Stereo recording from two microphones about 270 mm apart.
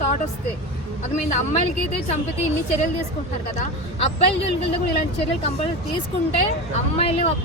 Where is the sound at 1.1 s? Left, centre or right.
Left.